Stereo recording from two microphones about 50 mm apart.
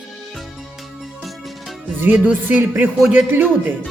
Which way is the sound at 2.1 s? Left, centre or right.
Right.